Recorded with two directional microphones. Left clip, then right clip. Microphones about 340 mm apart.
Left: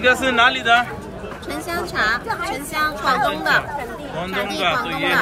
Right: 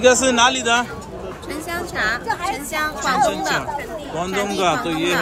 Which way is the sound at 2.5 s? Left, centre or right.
Centre.